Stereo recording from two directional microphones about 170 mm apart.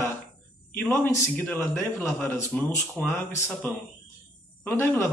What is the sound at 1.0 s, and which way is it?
Speech, 15° left (ahead or behind).